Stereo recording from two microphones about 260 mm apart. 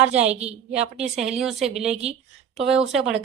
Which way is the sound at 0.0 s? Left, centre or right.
Right.